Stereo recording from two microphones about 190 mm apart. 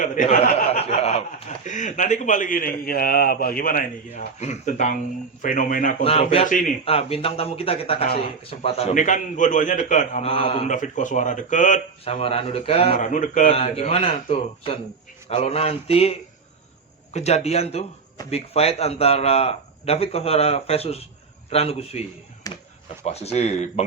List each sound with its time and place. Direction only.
0.0 s speech: 40° left (ahead or behind)
0.7 s speech: 35° left (ahead or behind)
6.0 s speech: 30° left (ahead or behind)
6.5 s speech: 45° left (ahead or behind)
6.8 s speech: 30° left (ahead or behind)
13.5 s speech: 30° left (ahead or behind)
22.5 s a sound: 20° left (ahead or behind)
23.0 s speech: 35° left (ahead or behind)